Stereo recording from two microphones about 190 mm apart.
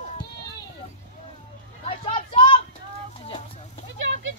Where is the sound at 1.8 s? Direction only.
30° left (ahead or behind).